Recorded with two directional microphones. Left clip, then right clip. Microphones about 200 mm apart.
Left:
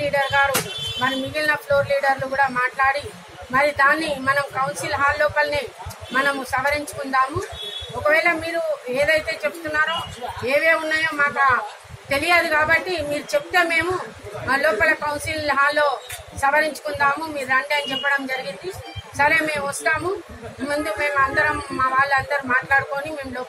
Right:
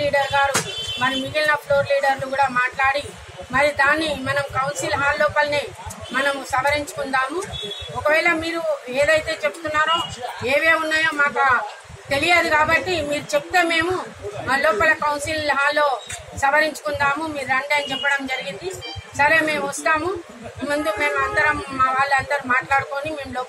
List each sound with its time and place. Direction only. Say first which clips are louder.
0.0 s music: even; 10° left (ahead or behind)
1.0 s a woman's voice: right 2 dB; 10° left (ahead or behind)